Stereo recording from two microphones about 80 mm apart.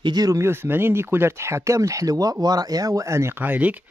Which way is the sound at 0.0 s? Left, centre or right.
Right.